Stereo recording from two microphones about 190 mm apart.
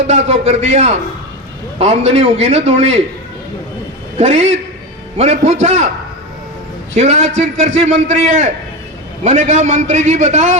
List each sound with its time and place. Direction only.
0.1 s a man's voice: 35° right (ahead or behind)
4.2 s a man's voice: 35° right (ahead or behind)
6.9 s a man's voice: 35° right (ahead or behind)